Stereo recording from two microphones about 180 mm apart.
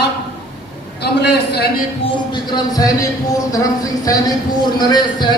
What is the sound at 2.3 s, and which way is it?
Speech, 25° left (ahead or behind).